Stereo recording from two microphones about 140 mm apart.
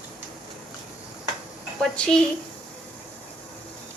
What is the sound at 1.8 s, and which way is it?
Speech, 5° left (ahead or behind).